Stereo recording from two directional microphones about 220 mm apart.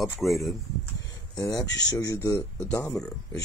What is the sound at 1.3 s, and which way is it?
Speech, 15° left (ahead or behind).